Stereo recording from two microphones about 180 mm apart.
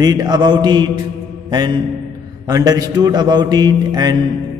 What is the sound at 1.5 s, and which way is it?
Mantra, 25° right (ahead or behind).